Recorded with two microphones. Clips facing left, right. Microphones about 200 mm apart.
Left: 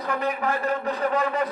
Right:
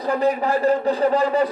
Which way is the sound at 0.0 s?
30° right (ahead or behind).